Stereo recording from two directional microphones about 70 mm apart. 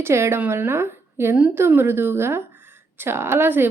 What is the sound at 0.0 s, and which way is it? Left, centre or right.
A woman's voice, right.